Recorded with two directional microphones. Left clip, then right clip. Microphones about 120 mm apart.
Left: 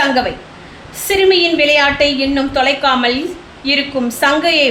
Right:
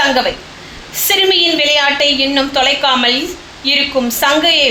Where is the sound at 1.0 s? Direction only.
20° left (ahead or behind).